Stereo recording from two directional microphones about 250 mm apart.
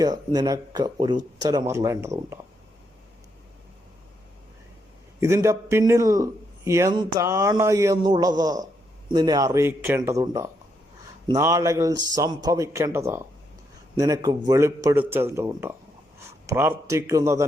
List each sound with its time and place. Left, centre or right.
0.0 s a man's voice: centre
5.2 s a man's voice: centre